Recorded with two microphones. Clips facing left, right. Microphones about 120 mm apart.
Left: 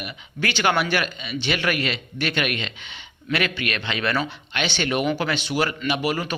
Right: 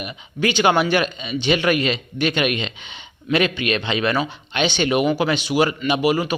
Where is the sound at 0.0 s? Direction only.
20° right (ahead or behind).